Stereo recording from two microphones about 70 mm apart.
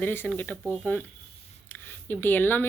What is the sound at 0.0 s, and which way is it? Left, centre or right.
Speech, left.